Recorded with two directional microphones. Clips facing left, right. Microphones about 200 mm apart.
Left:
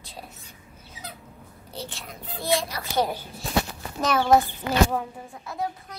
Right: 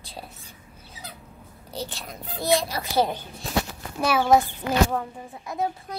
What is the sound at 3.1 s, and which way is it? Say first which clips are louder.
Speech: even; 10° left (ahead or behind).